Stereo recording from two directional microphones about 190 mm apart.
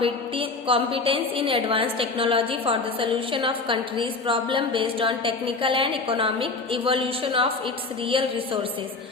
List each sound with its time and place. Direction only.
0.0 s a woman's voice: 30° right (ahead or behind)